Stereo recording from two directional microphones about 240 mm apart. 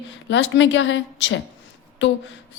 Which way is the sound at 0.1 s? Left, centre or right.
Left.